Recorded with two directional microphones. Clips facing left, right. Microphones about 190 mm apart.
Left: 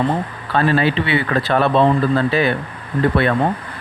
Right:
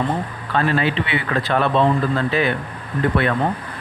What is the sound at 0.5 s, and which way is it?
Speech, 35° left (ahead or behind).